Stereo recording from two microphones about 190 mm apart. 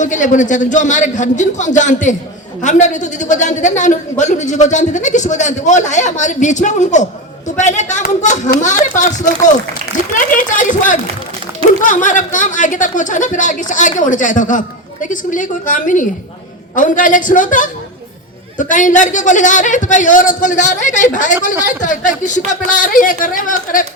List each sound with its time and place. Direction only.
0.0 s a man's voice: 40° left (ahead or behind)
10.3 s a man's voice: 45° left (ahead or behind)